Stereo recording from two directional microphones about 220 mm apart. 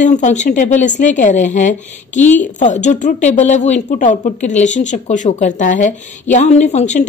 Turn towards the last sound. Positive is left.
turn(degrees=30)  # may be behind; listen again after turning